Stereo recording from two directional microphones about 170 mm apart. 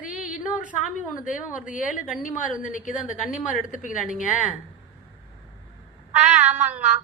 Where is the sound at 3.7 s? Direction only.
50° left (ahead or behind).